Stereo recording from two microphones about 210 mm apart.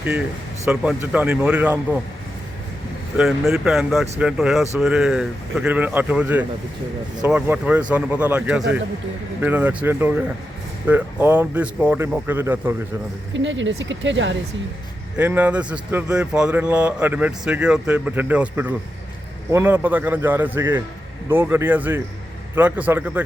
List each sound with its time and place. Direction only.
0.0 s speech: 5° right (ahead or behind)
3.2 s a man's voice: centre (ahead or behind)
13.3 s speech: 60° right (ahead or behind)
15.2 s a man's voice: 5° right (ahead or behind)